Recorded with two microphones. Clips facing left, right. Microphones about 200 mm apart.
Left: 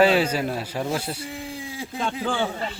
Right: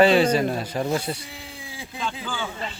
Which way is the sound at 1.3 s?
45° left (ahead or behind).